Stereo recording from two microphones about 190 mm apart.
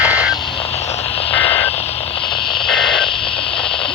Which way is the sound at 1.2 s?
30° left (ahead or behind).